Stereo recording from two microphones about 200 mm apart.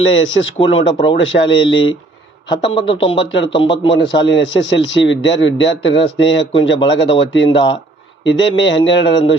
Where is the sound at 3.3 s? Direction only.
65° left (ahead or behind).